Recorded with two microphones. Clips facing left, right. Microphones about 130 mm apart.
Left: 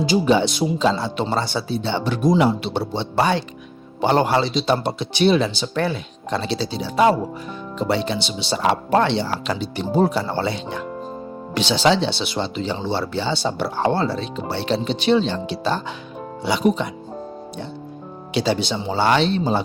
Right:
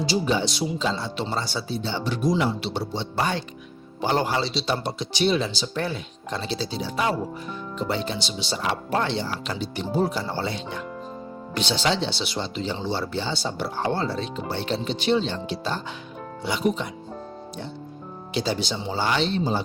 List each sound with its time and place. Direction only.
0.1 s speech: 60° left (ahead or behind); by 10.8 s 80° left
11.5 s speech: 90° left; by 16.9 s 75° left (ahead or behind)
18.3 s speech: 70° left (ahead or behind)